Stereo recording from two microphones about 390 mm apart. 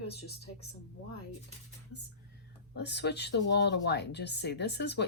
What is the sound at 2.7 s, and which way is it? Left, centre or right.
Speech, left.